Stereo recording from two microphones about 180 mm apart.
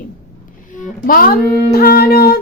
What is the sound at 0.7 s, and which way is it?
Music, 50° left (ahead or behind).